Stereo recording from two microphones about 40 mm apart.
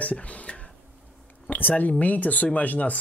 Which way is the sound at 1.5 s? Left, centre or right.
Left.